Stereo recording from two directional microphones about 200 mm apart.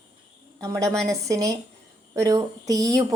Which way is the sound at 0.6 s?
15° right (ahead or behind).